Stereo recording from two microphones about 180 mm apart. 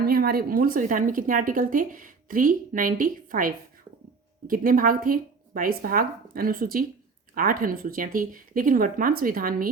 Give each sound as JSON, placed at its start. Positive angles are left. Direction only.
{"t": 0.0, "sound": "speech", "side_deg": -55}